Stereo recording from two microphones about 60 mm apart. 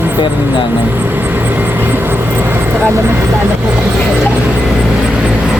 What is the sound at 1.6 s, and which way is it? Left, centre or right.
Vehicle, right.